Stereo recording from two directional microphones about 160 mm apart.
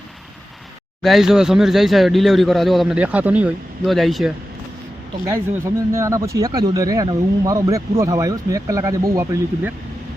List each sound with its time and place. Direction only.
1.0 s speech: centre (ahead or behind)
5.2 s speech: 15° right (ahead or behind)